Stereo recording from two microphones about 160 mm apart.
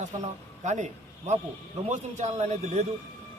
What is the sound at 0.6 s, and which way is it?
Speech, 45° right (ahead or behind).